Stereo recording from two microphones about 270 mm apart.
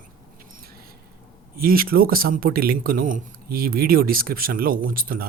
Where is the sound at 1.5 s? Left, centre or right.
Right.